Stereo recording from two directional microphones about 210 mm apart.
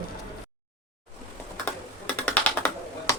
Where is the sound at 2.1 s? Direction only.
5° left (ahead or behind).